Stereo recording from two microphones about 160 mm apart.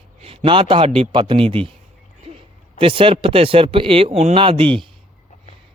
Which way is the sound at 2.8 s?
35° right (ahead or behind).